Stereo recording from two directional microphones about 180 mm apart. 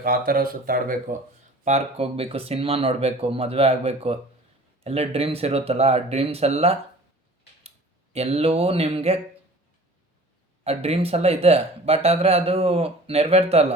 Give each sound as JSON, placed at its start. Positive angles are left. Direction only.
{"t": 0.0, "sound": "speech", "side_deg": -55}
{"t": 1.6, "sound": "speech", "side_deg": -35}
{"t": 8.1, "sound": "speech", "side_deg": -35}
{"t": 10.6, "sound": "speech", "side_deg": -35}